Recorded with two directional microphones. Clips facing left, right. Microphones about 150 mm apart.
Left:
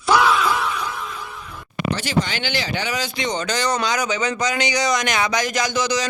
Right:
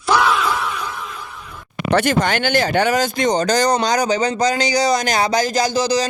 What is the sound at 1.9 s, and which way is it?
Speech, 55° right (ahead or behind).